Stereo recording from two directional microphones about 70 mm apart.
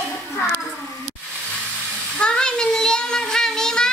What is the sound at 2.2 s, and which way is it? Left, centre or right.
Child singing, centre.